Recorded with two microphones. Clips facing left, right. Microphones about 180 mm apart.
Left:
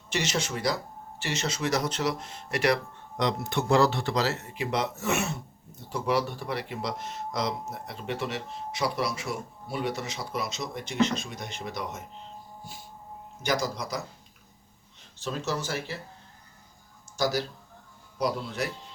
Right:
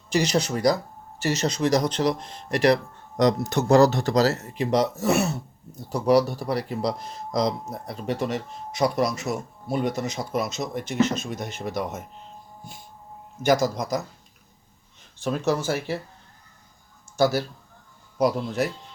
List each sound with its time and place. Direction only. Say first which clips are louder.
0.1 s speech: right 7 dB; 35° right (ahead or behind)
13.4 s speech: right 8 dB; 50° right (ahead or behind)
15.2 s speech: right 7 dB; 55° right (ahead or behind)
17.2 s speech: right 6 dB; 55° right (ahead or behind)